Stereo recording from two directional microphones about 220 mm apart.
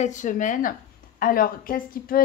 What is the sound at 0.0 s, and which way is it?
Speech, 35° left (ahead or behind).